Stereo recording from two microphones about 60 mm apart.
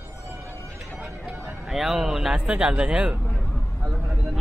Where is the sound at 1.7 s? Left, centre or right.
Centre.